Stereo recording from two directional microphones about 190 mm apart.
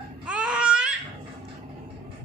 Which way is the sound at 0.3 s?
5° right (ahead or behind).